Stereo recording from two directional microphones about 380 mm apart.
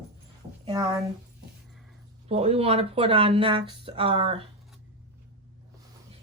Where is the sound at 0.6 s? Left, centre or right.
Centre.